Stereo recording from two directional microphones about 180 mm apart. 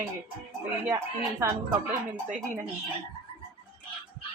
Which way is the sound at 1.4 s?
15° right (ahead or behind).